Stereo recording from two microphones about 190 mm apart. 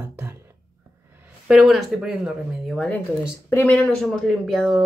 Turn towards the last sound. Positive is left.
turn(degrees=0)  # may be behind; listen again after turning